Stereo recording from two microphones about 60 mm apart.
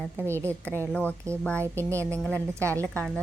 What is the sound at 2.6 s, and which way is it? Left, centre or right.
Speech, right.